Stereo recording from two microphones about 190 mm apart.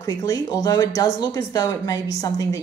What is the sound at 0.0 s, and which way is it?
A woman's voice, 20° left (ahead or behind).